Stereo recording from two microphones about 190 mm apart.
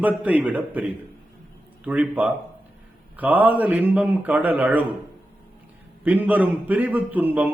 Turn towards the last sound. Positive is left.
turn(degrees=-10)  # may be behind; listen again after turning